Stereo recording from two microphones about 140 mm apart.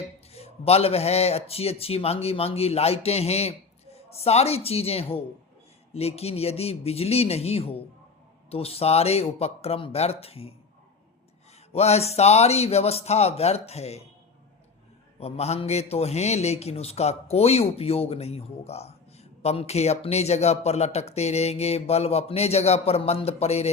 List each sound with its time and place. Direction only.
0.3 s a man's voice: 45° left (ahead or behind)
11.7 s a man's voice: 50° left (ahead or behind)
15.2 s a man's voice: 50° left (ahead or behind)